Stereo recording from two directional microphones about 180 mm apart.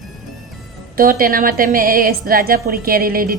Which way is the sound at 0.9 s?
55° right (ahead or behind).